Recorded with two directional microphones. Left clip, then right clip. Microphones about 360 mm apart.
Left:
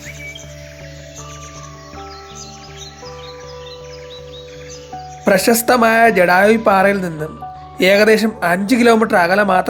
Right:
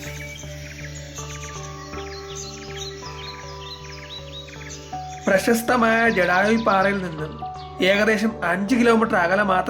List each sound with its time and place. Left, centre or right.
5.2 s speech: centre